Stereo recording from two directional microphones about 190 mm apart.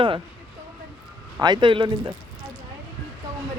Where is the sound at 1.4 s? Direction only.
20° right (ahead or behind).